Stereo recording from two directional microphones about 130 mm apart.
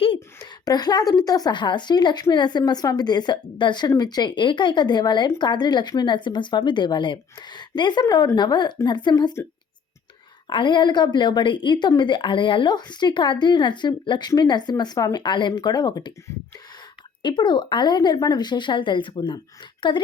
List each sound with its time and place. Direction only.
0.6 s speech: 30° left (ahead or behind)
10.5 s speech: 40° left (ahead or behind)
17.2 s speech: 35° left (ahead or behind)